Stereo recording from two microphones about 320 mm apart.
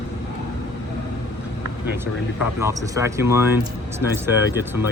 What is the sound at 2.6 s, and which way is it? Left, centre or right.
Speech, centre.